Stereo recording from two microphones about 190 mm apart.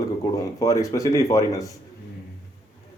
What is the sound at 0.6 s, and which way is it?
Speech, 15° left (ahead or behind).